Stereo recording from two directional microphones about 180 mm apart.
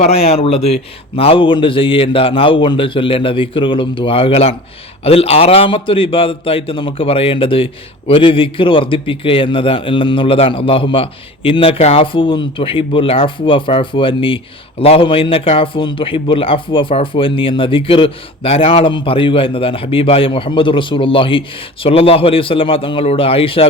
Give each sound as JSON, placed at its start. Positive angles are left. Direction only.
{"t": 0.0, "sound": "a man's voice", "side_deg": 35}